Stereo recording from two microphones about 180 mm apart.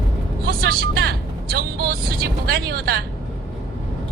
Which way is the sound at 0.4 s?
60° right (ahead or behind).